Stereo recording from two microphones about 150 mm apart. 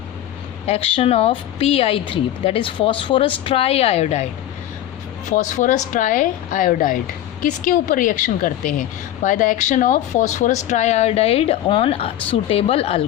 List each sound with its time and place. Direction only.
0.6 s a woman's voice: 40° left (ahead or behind)
5.3 s a woman's voice: 55° left (ahead or behind)